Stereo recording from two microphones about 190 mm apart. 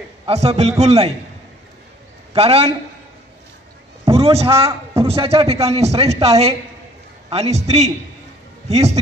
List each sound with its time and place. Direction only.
0.3 s a woman's voice: 35° right (ahead or behind)
2.3 s a woman's voice: 30° right (ahead or behind)
4.0 s a man's voice: 30° right (ahead or behind)